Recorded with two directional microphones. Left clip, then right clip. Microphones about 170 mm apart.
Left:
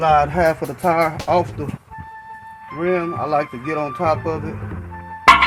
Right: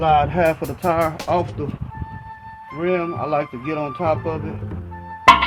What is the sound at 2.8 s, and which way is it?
Speech, 30° left (ahead or behind).